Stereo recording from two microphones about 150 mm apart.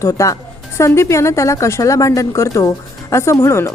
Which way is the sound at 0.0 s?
20° left (ahead or behind).